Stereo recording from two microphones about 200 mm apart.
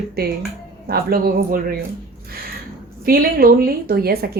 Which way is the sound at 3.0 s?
45° right (ahead or behind).